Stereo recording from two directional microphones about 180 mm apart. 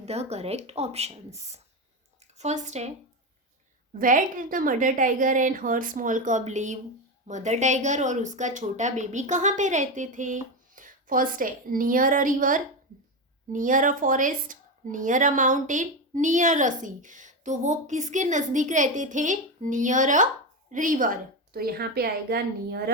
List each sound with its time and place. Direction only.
0.0 s speech: 35° right (ahead or behind)
3.9 s a woman's voice: 50° right (ahead or behind)